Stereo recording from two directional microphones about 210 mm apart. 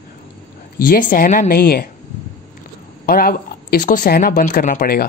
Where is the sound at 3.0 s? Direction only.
45° left (ahead or behind).